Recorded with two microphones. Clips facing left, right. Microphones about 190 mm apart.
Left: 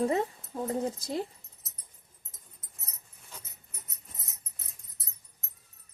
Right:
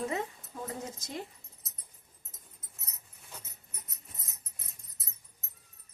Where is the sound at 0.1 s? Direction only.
35° left (ahead or behind).